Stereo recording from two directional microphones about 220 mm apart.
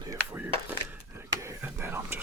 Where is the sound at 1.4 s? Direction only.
10° right (ahead or behind).